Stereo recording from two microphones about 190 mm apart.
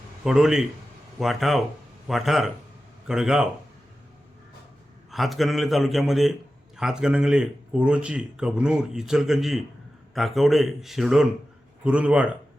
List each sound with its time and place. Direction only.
0.3 s speech: centre (ahead or behind)
5.1 s a man's voice: centre (ahead or behind)